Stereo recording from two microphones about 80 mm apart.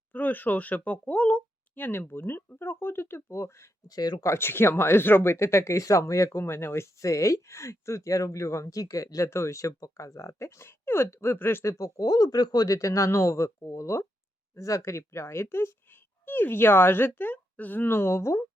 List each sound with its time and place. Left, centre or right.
0.1 s speech: left
3.8 s speech: left
4.3 s speech: left